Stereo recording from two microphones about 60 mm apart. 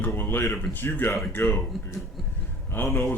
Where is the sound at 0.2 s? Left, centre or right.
Left.